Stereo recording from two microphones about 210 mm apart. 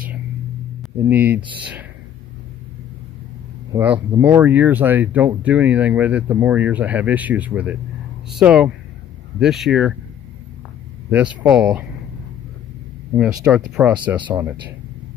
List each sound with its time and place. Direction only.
1.0 s speech: 10° right (ahead or behind)
3.7 s speech: 10° right (ahead or behind)
11.1 s speech: 5° right (ahead or behind)
13.4 s speech: 5° right (ahead or behind)
14.2 s speech: 20° right (ahead or behind)